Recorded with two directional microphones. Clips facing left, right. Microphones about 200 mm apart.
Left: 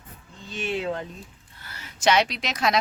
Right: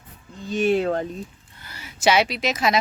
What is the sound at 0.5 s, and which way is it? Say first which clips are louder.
Speech: right 8 dB; 45° right (ahead or behind).